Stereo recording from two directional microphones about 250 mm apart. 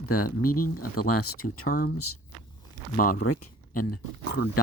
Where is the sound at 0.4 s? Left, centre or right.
Left.